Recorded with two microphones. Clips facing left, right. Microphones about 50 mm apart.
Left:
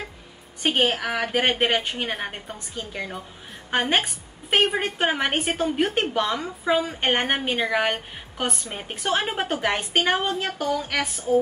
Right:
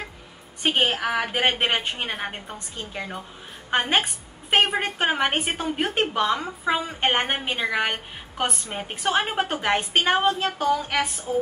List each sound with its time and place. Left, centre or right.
0.6 s a woman's voice: centre
4.0 s a woman's voice: centre
6.6 s a woman's voice: centre